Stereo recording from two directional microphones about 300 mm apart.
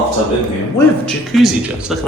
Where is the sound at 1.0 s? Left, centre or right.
Centre.